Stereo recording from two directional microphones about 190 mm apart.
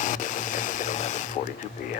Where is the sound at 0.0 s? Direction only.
40° left (ahead or behind).